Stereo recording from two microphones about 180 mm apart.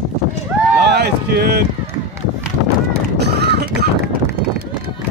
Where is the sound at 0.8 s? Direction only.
65° right (ahead or behind).